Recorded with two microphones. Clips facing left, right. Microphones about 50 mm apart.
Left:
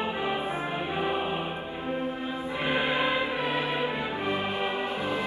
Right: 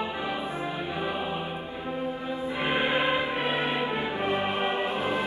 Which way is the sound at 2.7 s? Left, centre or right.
Right.